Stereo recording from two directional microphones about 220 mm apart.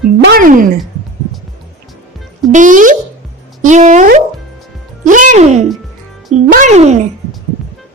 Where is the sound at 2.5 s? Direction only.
35° right (ahead or behind).